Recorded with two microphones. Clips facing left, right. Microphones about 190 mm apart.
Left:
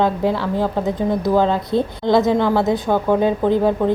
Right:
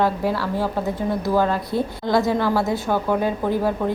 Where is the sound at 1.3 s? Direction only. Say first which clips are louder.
Left 3 dB; 20° left (ahead or behind).